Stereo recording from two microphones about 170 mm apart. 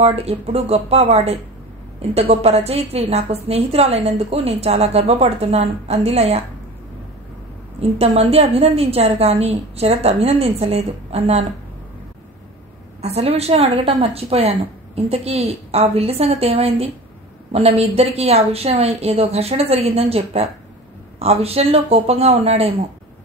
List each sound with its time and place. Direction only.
0.0 s a woman's voice: 35° right (ahead or behind)
8.0 s a woman's voice: 35° right (ahead or behind)
13.0 s a woman's voice: 35° right (ahead or behind)